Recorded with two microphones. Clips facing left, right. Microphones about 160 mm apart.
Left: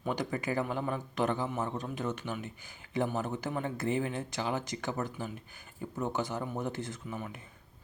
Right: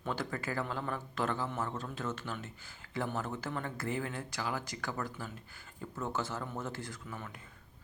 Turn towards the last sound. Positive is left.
turn(degrees=15)  # may be behind; listen again after turning